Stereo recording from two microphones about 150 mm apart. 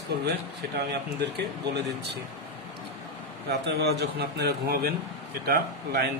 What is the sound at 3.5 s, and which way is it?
Speech, 90° right.